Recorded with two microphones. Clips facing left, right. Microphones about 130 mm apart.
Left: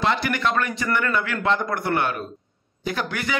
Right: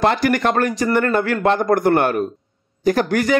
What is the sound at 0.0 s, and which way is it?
A man's voice, 45° right (ahead or behind).